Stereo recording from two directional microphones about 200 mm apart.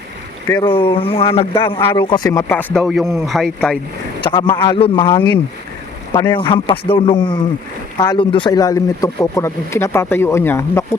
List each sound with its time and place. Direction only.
0.6 s speech: 25° left (ahead or behind); by 3.8 s 5° left (ahead or behind)
4.2 s speech: 20° left (ahead or behind)